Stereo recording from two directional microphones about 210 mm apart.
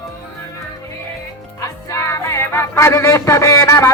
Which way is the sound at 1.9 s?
15° left (ahead or behind).